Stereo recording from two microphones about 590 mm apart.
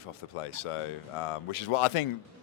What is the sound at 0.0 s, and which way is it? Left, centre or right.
A man's voice, left.